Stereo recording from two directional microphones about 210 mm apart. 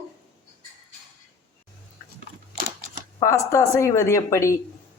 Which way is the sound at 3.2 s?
15° left (ahead or behind).